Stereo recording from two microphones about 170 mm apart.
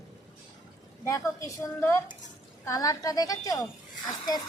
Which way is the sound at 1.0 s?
20° left (ahead or behind).